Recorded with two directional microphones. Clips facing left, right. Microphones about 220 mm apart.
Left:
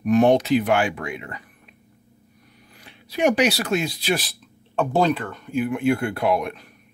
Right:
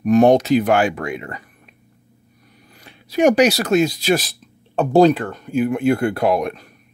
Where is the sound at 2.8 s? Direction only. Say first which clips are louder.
Right 6 dB; 40° right (ahead or behind).